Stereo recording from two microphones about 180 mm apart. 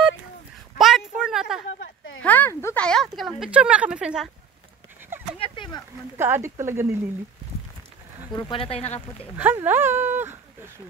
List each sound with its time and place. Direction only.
0.7 s a sound: centre (ahead or behind)
2.2 s speech: 10° left (ahead or behind)
5.4 s a sound: 25° left (ahead or behind)
6.1 s speech: 10° right (ahead or behind)
8.5 s speech: 30° left (ahead or behind)
9.4 s speech: 10° right (ahead or behind)